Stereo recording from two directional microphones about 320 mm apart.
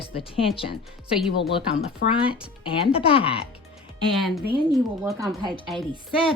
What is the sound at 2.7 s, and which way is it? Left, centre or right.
Speech, centre.